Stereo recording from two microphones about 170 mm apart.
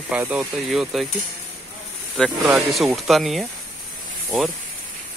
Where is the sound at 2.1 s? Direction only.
Centre (ahead or behind).